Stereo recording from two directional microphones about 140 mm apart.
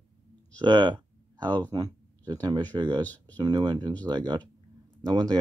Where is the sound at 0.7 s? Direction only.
35° right (ahead or behind).